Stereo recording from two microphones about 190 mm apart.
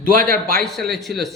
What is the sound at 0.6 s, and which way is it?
Speech, centre (ahead or behind).